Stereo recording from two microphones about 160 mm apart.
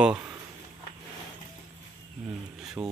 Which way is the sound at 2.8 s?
15° right (ahead or behind).